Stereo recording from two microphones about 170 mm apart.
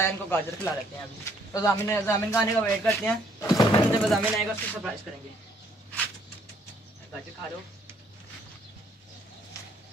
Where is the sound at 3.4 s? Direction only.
20° left (ahead or behind).